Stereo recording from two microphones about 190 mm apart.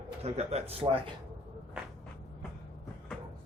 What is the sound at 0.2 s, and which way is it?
Speech, 35° right (ahead or behind).